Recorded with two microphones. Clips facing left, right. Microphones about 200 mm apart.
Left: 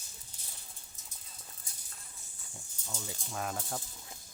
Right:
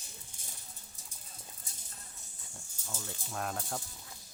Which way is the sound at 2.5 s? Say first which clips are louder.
Left 1 dB; centre (ahead or behind).